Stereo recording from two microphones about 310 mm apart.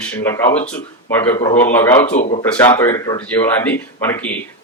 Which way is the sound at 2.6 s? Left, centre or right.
Centre.